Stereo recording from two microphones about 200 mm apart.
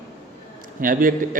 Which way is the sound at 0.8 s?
45° right (ahead or behind).